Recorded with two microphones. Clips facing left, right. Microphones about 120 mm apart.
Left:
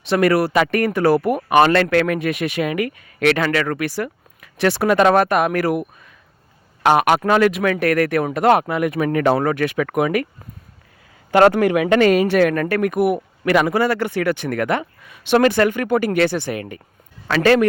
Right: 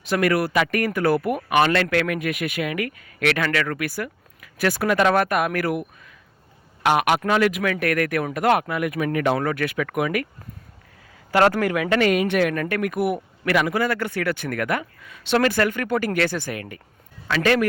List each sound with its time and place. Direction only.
0.0 s speech: 30° left (ahead or behind)
6.8 s a woman's voice: 40° left (ahead or behind)
11.3 s speech: 20° left (ahead or behind)
11.9 s a woman's voice: 35° left (ahead or behind)
12.9 s speech: 20° left (ahead or behind)
17.2 s a woman's voice: 40° left (ahead or behind)